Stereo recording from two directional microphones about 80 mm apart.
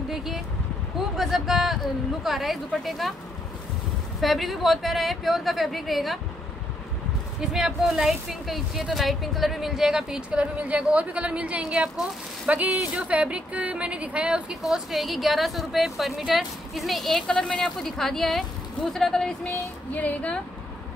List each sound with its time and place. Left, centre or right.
0.1 s speech: centre
4.2 s speech: centre
7.3 s a woman's voice: centre
19.4 s child singing: centre